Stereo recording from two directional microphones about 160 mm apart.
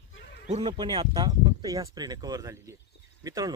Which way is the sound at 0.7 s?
25° right (ahead or behind).